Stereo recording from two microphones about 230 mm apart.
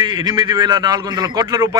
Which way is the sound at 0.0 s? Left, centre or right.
Centre.